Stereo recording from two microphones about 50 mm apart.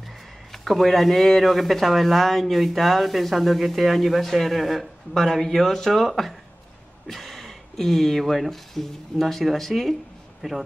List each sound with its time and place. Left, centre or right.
0.0 s a man's voice: centre